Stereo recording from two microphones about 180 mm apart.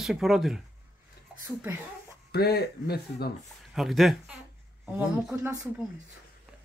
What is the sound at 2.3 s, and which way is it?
Speech, 60° left (ahead or behind).